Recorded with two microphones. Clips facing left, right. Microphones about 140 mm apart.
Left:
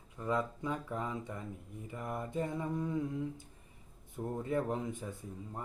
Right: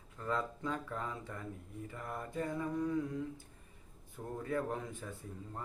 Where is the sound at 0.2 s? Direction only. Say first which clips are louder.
Left 3 dB; 15° left (ahead or behind).